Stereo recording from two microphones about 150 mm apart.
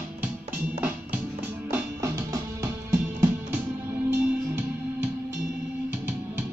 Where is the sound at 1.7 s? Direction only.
20° right (ahead or behind).